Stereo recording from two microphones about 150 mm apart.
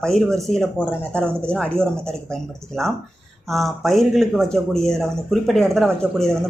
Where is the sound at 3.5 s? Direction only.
Centre (ahead or behind).